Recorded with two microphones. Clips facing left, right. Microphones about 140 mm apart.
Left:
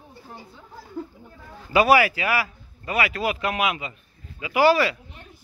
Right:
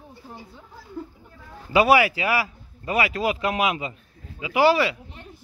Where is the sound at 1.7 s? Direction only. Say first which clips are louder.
Even; 20° right (ahead or behind).